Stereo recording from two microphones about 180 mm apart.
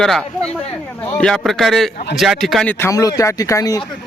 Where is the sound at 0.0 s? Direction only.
5° left (ahead or behind).